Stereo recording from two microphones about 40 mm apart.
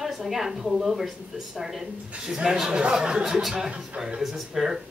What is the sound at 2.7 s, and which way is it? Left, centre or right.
A man's voice, right.